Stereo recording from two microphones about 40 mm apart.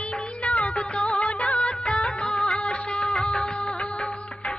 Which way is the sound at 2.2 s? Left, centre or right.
Left.